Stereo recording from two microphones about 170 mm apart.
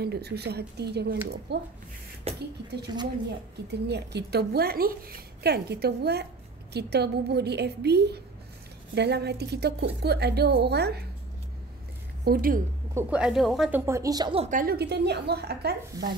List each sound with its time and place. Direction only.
0.0 s a woman's voice: 70° right (ahead or behind)
2.3 s a woman's voice: 35° right (ahead or behind)
3.8 s a woman's voice: 80° right
12.3 s a woman's voice: 55° right (ahead or behind)
12.9 s a woman's voice: 5° right (ahead or behind); by 14.3 s 20° right (ahead or behind)
14.3 s a woman's voice: 40° right (ahead or behind)
14.6 s a woman's voice: 65° right (ahead or behind)